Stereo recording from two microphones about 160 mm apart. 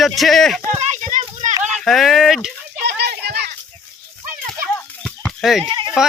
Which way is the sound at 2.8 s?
90° right.